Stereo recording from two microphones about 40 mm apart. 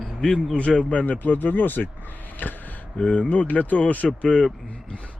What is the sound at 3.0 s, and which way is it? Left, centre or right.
Speech, left.